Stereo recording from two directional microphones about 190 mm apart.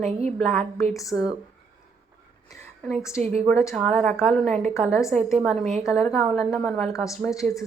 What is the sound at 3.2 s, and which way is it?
Speech, 35° right (ahead or behind).